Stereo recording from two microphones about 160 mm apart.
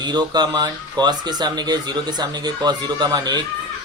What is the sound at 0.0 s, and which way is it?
Speech, 25° right (ahead or behind).